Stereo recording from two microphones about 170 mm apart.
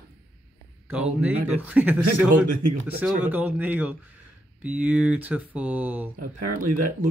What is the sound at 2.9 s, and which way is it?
Speech, 10° right (ahead or behind).